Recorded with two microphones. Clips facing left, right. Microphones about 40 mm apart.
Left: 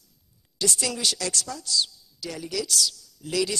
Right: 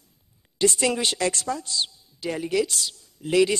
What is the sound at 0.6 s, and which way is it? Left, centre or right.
A woman's voice, right.